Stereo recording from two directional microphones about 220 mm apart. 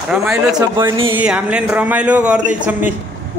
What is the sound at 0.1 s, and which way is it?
Speech, 5° right (ahead or behind).